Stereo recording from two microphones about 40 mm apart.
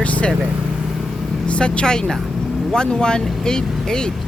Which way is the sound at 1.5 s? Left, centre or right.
Left.